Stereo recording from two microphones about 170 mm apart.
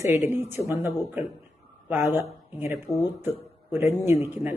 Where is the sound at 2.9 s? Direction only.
20° left (ahead or behind).